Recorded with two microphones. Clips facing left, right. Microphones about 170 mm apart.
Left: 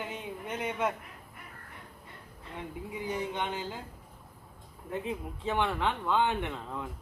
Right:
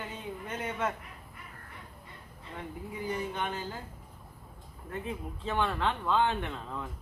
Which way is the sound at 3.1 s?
20° left (ahead or behind).